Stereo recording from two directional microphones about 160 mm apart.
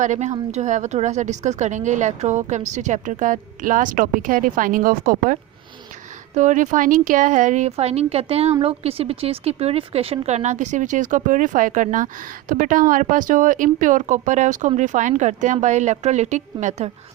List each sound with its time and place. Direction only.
0.0 s speech: 50° right (ahead or behind)